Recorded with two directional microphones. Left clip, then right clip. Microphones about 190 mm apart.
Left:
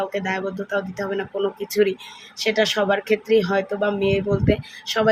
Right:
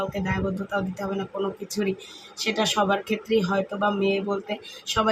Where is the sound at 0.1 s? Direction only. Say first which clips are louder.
Left 4 dB; 15° left (ahead or behind).